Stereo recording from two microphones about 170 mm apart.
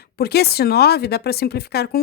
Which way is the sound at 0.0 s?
70° left (ahead or behind).